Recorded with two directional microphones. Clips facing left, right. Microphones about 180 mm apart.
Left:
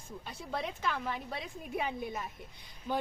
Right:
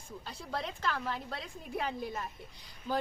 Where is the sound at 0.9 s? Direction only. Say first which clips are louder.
Right 1 dB; 15° left (ahead or behind).